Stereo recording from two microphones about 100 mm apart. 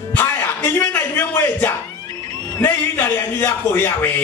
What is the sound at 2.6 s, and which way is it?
A man's voice, 20° left (ahead or behind).